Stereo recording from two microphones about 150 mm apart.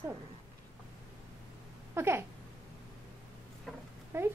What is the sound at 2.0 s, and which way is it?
Speech, 15° right (ahead or behind).